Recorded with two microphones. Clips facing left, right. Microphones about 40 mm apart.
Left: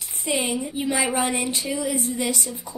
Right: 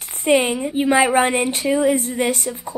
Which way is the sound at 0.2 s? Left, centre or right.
Right.